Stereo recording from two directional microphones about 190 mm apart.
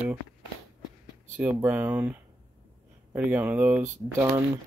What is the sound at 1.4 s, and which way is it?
Speech, 10° right (ahead or behind).